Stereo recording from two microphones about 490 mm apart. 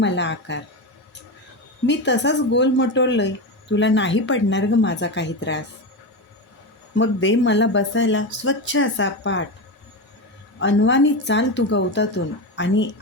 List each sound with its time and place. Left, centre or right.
0.0 s speech: left
1.9 s speech: left
6.9 s speech: left
10.6 s speech: left